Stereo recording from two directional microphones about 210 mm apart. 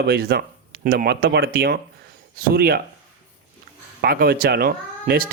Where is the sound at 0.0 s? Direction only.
45° right (ahead or behind).